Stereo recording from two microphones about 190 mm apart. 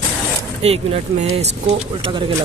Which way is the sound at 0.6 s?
35° right (ahead or behind).